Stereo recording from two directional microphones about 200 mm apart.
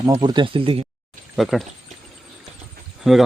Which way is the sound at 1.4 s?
Centre (ahead or behind).